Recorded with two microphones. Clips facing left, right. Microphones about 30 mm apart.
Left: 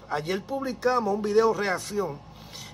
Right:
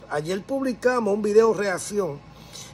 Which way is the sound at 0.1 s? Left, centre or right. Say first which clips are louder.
Right 2 dB; left.